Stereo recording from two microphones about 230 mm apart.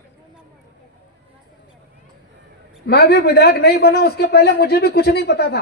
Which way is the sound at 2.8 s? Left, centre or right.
Left.